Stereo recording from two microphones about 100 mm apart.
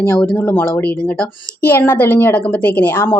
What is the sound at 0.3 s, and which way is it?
Speech, 20° left (ahead or behind).